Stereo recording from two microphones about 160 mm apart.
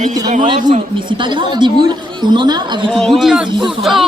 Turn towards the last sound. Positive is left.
turn(degrees=0)  # may be behind; listen again after turning